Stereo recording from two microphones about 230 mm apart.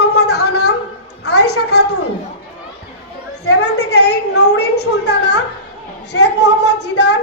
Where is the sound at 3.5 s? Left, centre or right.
Left.